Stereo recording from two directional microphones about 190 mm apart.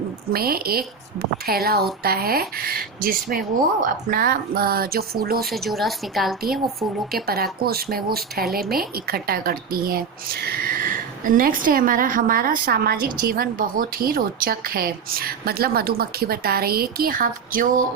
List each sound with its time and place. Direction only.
0.3 s speech: 50° right (ahead or behind)
5.5 s a woman's voice: centre (ahead or behind)
7.1 s speech: 55° right (ahead or behind)